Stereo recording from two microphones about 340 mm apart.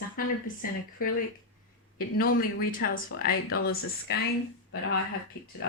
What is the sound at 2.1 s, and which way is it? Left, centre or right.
Speech, left.